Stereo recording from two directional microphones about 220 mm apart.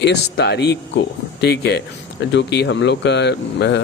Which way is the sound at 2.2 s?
55° left (ahead or behind).